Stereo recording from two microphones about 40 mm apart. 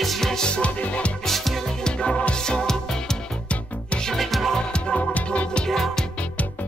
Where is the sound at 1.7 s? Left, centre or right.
Left.